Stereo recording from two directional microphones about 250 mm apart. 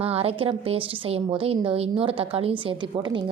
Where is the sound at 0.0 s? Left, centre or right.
Right.